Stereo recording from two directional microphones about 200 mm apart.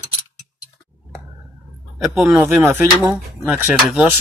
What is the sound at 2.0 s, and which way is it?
Speech, centre (ahead or behind).